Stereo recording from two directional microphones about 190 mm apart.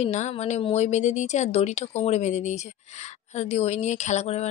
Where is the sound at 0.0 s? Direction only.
35° left (ahead or behind).